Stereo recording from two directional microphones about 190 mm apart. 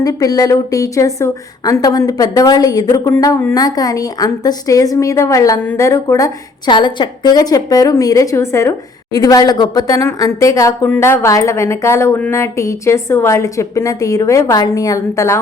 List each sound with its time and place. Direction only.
0.0 s a woman's voice: 20° left (ahead or behind)